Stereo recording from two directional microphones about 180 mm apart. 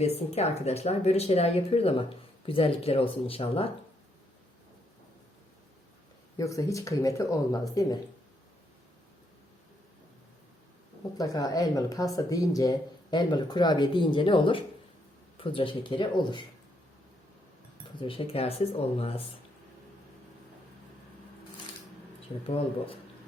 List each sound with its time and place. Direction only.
0.0 s speech: 35° left (ahead or behind)
6.3 s speech: 20° left (ahead or behind)
11.2 s speech: 20° left (ahead or behind)
18.0 s speech: 30° left (ahead or behind)